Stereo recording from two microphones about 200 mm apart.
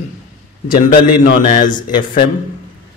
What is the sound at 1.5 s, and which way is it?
Speech, 40° left (ahead or behind).